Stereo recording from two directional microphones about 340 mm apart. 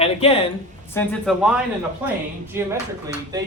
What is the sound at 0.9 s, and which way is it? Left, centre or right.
Speech, centre.